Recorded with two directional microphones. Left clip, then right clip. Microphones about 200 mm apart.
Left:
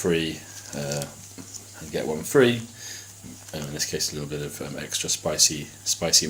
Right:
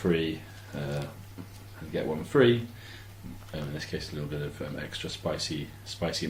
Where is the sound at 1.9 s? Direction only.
55° left (ahead or behind).